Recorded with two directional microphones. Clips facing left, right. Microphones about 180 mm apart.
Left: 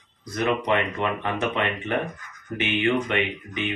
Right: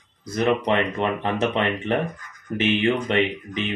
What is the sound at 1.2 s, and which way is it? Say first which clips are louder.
Speech: right 3 dB; 30° right (ahead or behind).